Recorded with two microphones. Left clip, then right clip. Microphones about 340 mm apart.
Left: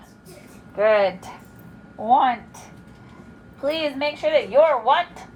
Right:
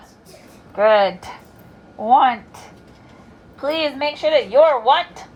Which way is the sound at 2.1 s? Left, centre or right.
Right.